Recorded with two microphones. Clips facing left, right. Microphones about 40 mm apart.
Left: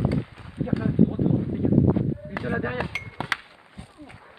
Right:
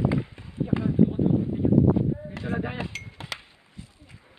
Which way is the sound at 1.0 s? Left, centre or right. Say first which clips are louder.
Even; centre.